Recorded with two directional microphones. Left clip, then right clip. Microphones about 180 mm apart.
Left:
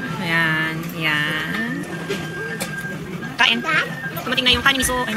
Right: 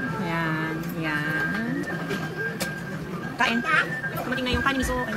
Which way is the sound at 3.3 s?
5° left (ahead or behind).